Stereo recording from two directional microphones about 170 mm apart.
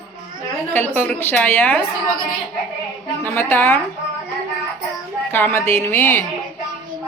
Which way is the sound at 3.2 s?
15° left (ahead or behind).